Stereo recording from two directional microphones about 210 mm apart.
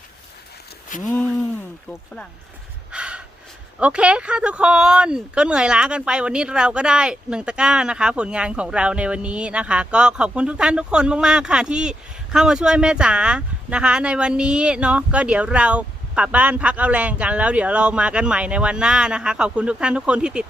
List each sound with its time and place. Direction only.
0.9 s speech: 40° left (ahead or behind)
2.9 s gasp: 5° right (ahead or behind)
3.8 s speech: 5° right (ahead or behind)